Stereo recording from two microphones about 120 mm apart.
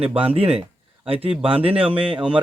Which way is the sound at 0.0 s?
55° right (ahead or behind).